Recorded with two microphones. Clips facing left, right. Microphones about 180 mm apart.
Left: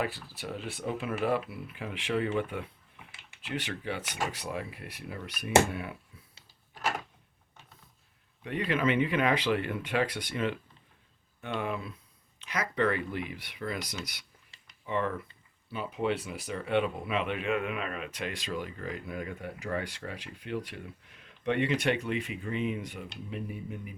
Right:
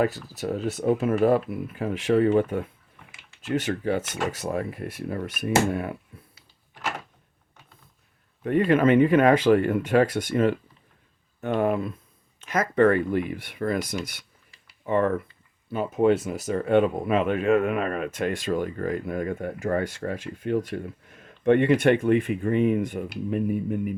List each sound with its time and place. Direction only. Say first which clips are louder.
0.0 s speech: right 9 dB; 45° right (ahead or behind)
8.4 s speech: right 10 dB; 45° right (ahead or behind)